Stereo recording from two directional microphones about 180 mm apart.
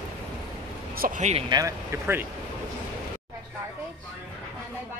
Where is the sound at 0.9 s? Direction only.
50° right (ahead or behind).